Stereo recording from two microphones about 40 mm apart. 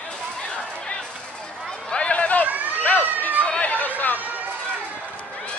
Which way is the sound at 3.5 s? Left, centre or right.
Left.